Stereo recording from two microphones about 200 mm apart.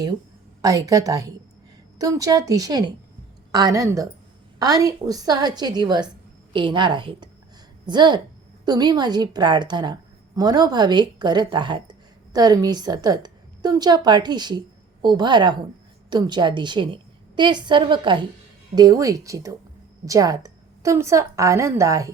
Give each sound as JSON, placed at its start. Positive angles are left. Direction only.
{"t": 0.6, "sound": "a woman's voice", "side_deg": -15}